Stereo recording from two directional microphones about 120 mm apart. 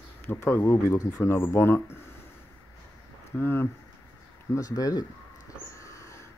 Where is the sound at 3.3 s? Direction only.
20° left (ahead or behind).